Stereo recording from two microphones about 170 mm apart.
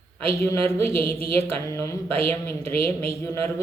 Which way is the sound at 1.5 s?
15° left (ahead or behind).